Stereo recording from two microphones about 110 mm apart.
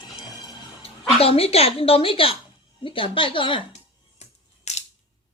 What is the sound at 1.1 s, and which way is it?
A woman's voice, 60° left (ahead or behind).